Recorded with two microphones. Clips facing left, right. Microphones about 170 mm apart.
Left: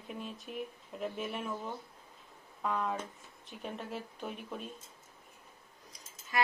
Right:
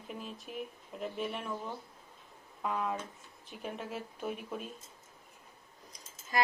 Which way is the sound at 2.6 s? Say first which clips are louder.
Even; centre (ahead or behind).